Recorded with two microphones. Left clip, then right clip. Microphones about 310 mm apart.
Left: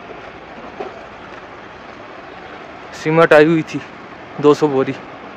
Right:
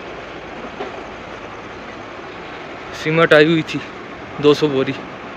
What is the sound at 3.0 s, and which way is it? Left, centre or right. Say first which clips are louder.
Speech: left 2 dB; centre.